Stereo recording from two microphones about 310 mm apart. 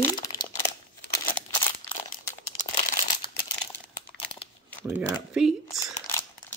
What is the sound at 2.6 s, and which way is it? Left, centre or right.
Crumpling, left.